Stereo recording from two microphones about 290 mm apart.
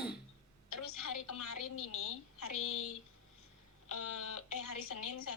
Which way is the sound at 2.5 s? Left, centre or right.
Left.